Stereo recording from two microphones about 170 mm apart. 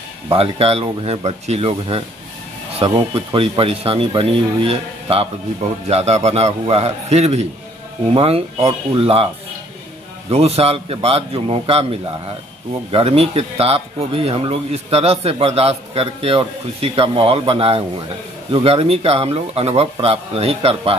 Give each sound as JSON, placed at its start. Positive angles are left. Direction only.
{"t": 0.3, "sound": "speech", "side_deg": -35}
{"t": 10.3, "sound": "speech", "side_deg": -35}